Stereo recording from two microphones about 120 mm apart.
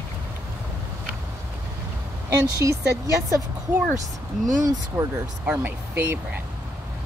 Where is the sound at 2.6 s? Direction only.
25° right (ahead or behind).